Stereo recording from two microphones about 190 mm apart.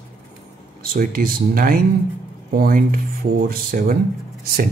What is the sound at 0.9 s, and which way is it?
Speech, 50° right (ahead or behind).